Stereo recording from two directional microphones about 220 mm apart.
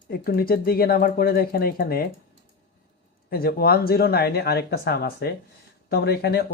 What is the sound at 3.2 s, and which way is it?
Speech, 45° left (ahead or behind).